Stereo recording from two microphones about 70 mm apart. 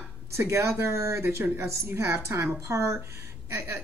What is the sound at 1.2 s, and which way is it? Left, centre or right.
Speech, right.